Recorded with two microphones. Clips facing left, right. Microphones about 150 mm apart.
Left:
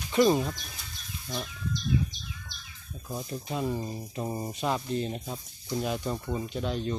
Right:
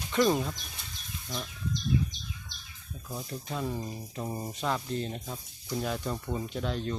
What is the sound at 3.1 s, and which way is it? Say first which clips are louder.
Speech: left 3 dB; 20° left (ahead or behind).